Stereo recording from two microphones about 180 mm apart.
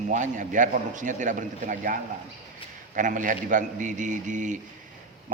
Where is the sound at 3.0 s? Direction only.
45° right (ahead or behind).